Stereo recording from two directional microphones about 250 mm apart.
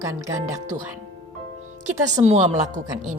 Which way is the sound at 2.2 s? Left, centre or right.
Right.